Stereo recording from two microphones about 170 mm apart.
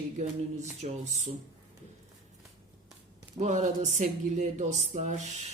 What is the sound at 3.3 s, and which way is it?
A man's voice, 45° right (ahead or behind).